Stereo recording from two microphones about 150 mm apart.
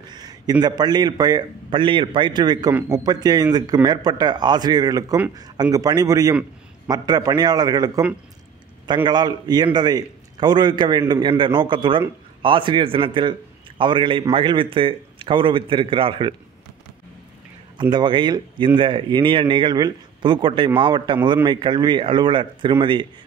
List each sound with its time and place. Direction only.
0.1 s a man's voice: 25° right (ahead or behind)
17.7 s a man's voice: 30° right (ahead or behind)